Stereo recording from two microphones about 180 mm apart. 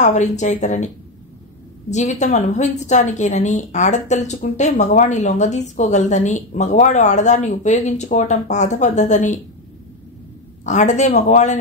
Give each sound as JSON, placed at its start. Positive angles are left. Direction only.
{"t": 0.0, "sound": "a woman's voice", "side_deg": 40}
{"t": 10.6, "sound": "a woman's voice", "side_deg": 40}